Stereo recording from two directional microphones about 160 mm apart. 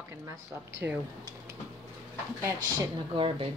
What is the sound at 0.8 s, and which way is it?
Speech, 15° right (ahead or behind).